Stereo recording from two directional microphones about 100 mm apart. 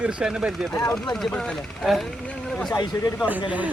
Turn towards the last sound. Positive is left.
turn(degrees=40)  # may be behind; listen again after turning